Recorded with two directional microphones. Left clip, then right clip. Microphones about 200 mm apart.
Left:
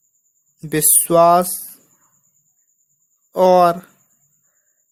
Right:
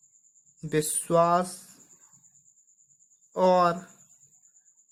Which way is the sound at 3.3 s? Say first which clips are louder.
Left 10 dB; 30° left (ahead or behind).